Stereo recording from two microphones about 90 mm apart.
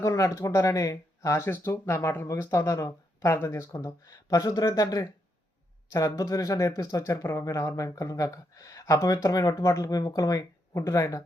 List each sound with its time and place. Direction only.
0.0 s speech: 35° left (ahead or behind)